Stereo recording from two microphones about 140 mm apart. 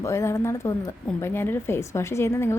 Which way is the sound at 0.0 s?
20° left (ahead or behind).